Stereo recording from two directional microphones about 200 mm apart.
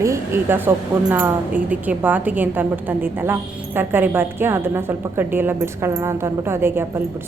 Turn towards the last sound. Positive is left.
turn(degrees=-10)  # may be behind; listen again after turning